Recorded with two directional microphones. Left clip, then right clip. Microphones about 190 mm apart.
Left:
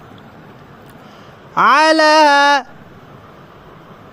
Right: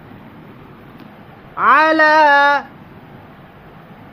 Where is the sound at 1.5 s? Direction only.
65° left (ahead or behind).